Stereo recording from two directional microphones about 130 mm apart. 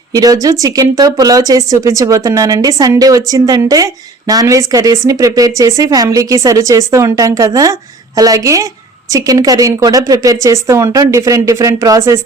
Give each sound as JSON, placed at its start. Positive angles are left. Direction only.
{"t": 0.1, "sound": "speech", "side_deg": -30}